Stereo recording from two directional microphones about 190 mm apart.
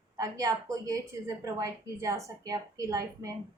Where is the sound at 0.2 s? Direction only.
20° right (ahead or behind).